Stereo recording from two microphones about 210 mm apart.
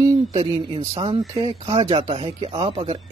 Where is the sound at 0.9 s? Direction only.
30° right (ahead or behind).